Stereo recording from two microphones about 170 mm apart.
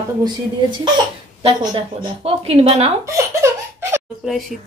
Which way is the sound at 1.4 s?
30° right (ahead or behind).